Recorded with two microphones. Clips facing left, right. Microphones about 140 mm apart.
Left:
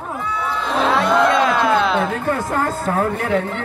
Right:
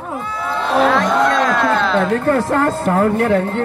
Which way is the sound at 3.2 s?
50° right (ahead or behind).